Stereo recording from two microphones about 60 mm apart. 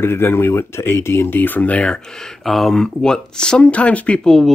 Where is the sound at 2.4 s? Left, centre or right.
Centre; by 4.2 s left.